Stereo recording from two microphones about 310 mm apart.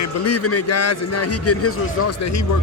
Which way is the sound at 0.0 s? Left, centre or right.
Left.